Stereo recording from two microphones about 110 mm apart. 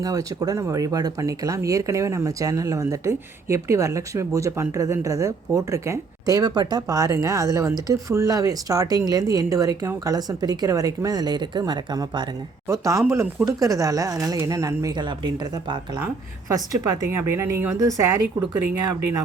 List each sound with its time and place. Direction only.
0.0 s speech: 35° right (ahead or behind)
12.6 s speech: 30° right (ahead or behind)
14.9 s speech: 45° right (ahead or behind)
16.5 s speech: 35° right (ahead or behind)
17.1 s speech: 25° right (ahead or behind)